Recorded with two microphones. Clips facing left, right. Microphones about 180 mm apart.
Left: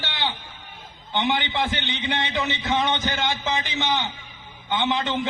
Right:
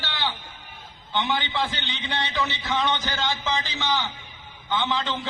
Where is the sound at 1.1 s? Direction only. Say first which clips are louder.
Left 2 dB; 20° left (ahead or behind).